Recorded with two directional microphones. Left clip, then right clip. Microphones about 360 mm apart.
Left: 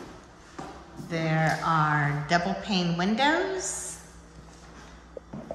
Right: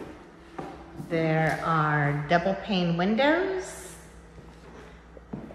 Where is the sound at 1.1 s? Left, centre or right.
Centre.